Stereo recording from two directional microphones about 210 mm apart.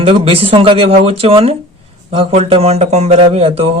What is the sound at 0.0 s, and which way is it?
Speech, 25° right (ahead or behind).